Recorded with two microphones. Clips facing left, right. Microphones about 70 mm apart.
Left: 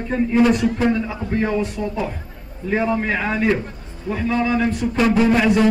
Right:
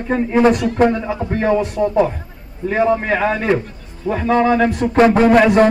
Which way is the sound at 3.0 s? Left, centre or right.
Right.